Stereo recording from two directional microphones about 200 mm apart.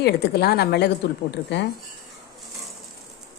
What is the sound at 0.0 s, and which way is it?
Speech, 50° left (ahead or behind).